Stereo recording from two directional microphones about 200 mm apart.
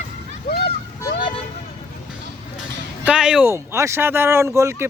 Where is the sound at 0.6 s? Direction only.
25° left (ahead or behind).